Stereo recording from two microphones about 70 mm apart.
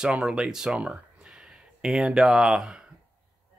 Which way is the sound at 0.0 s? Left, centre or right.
Centre.